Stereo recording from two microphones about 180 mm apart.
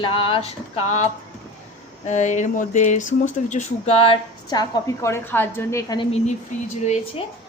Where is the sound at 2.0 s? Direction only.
40° left (ahead or behind); by 6.0 s 20° left (ahead or behind).